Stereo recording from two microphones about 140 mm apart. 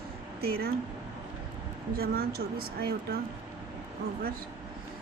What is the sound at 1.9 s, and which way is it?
Speech, 90° right.